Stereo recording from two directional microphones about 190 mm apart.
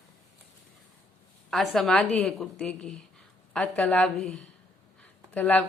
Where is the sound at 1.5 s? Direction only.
Centre (ahead or behind).